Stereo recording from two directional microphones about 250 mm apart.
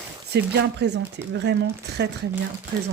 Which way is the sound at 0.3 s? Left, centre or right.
Right.